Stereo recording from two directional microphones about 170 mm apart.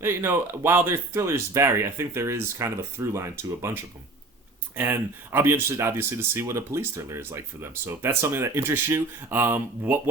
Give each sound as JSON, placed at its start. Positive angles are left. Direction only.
{"t": 0.0, "sound": "speech", "side_deg": -15}
{"t": 4.7, "sound": "speech", "side_deg": -10}